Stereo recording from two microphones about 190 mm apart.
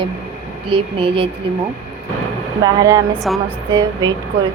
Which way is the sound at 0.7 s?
30° right (ahead or behind).